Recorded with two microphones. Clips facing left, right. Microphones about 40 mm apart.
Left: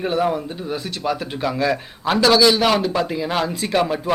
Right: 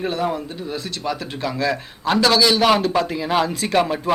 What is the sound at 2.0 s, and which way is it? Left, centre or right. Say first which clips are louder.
Speech: left 2 dB; centre.